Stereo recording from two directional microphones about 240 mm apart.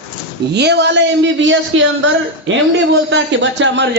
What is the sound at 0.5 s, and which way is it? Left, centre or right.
Speech, right.